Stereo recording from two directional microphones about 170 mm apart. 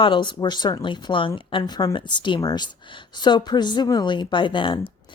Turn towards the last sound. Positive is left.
turn(degrees=30)  # may be behind; listen again after turning